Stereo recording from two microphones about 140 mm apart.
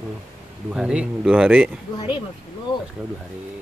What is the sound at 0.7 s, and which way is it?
Speech, 5° right (ahead or behind).